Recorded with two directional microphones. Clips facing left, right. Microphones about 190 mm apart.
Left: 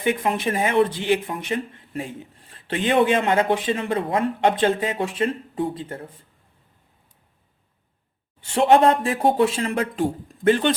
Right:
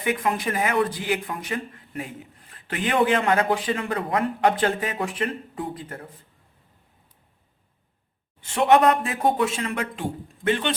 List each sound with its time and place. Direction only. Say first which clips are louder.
0.0 s speech: left 2 dB; 25° left (ahead or behind)
8.4 s speech: left 2 dB; 30° left (ahead or behind)